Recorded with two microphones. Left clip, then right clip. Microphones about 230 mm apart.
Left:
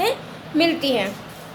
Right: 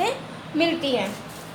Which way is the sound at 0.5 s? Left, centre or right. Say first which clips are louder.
Left 3 dB; left.